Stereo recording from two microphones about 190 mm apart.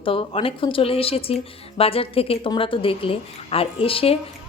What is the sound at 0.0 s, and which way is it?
A woman's voice, 30° left (ahead or behind).